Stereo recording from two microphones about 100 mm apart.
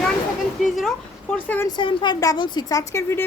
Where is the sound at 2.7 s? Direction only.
30° left (ahead or behind).